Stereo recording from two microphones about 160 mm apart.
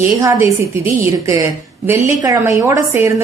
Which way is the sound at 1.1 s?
20° right (ahead or behind).